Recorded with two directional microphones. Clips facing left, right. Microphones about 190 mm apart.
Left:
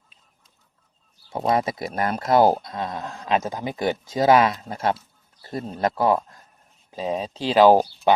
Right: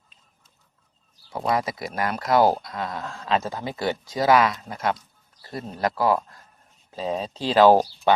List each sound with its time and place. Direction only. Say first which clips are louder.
1.3 s speech: left 3 dB; 25° left (ahead or behind)
6.9 s speech: left 1 dB; 10° left (ahead or behind)